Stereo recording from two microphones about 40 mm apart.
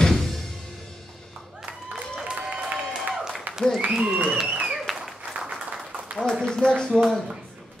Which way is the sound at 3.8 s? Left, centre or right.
Right.